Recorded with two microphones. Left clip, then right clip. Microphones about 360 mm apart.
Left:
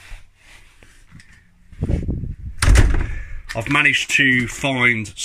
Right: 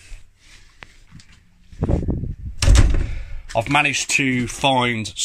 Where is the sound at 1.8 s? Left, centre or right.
Right.